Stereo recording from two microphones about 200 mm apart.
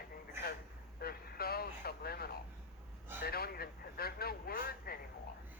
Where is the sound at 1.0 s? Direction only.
50° left (ahead or behind).